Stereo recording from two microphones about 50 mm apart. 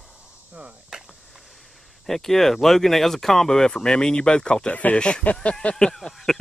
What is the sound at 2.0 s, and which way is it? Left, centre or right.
Speech, centre.